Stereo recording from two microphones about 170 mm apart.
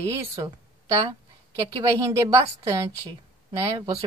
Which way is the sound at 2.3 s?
20° right (ahead or behind).